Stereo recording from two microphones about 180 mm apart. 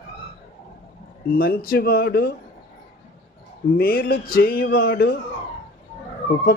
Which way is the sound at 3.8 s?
55° left (ahead or behind).